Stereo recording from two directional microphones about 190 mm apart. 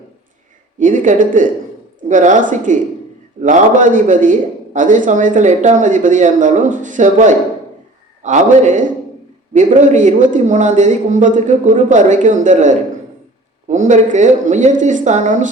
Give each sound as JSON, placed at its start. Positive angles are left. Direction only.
{"t": 0.8, "sound": "a man's voice", "side_deg": -40}